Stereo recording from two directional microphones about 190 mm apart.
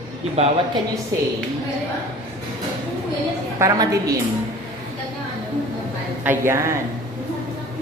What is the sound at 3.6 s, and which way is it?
Speech, 15° right (ahead or behind).